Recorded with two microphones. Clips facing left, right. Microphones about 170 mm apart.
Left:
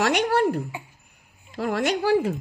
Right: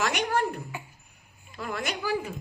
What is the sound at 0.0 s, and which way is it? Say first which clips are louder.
A man's voice: left 6 dB; 65° left (ahead or behind).